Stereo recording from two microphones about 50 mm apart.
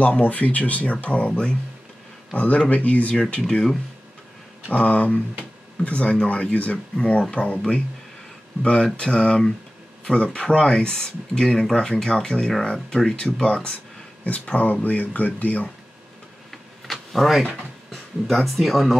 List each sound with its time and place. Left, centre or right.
0.0 s speech: left
4.7 s speech: left
8.9 s speech: centre
14.4 s speech: left
16.4 s a sound: centre
17.9 s speech: centre